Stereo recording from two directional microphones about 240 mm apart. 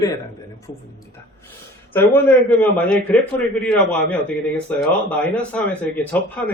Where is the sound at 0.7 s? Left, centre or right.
Centre.